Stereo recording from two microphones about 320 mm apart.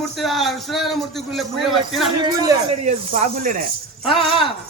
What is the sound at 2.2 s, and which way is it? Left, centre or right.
Speech, centre.